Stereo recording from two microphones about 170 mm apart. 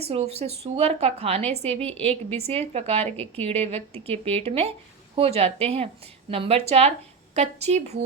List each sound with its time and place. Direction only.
0.1 s speech: 35° right (ahead or behind)